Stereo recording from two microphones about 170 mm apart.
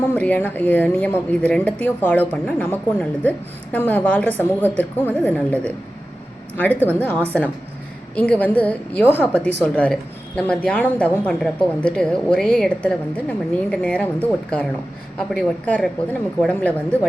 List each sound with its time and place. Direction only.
0.1 s a woman's voice: 10° left (ahead or behind)
8.1 s a woman's voice: 10° left (ahead or behind)